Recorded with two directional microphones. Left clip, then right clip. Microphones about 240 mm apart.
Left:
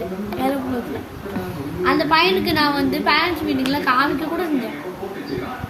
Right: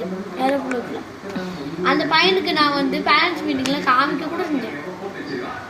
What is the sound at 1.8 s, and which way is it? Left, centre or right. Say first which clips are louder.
A woman's voice: even; centre.